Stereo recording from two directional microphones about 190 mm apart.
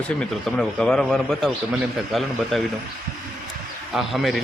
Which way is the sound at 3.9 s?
Centre (ahead or behind).